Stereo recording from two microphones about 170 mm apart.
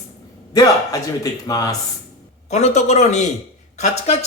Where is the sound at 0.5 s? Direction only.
20° left (ahead or behind).